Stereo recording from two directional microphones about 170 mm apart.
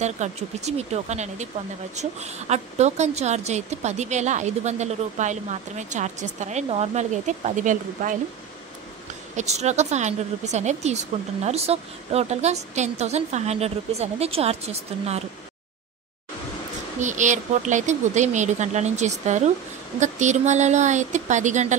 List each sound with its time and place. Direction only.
0.0 s a woman's voice: 40° right (ahead or behind)
9.4 s a woman's voice: 40° right (ahead or behind)
17.0 s a woman's voice: 45° right (ahead or behind)